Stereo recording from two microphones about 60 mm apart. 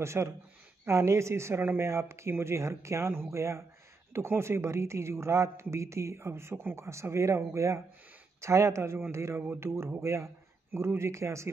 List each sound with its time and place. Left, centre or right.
0.0 s speech: right